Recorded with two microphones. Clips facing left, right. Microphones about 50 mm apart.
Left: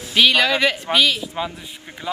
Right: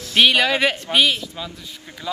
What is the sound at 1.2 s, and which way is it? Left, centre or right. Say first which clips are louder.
A man's voice: left 5 dB; left.